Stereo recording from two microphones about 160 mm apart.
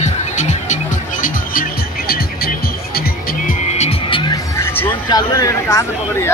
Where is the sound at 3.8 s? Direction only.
35° left (ahead or behind); by 5.0 s 15° left (ahead or behind).